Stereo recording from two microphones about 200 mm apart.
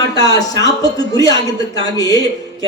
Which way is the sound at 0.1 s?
20° left (ahead or behind).